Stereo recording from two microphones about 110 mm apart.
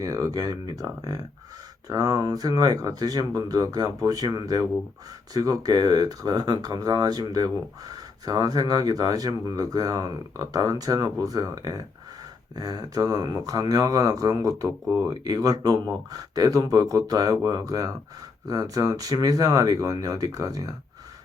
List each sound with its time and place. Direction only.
0.0 s speech: 35° right (ahead or behind)